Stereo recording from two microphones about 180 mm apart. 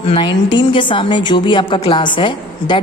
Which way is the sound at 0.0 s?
30° left (ahead or behind).